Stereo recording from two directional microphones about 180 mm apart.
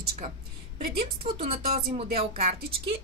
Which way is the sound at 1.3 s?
35° right (ahead or behind).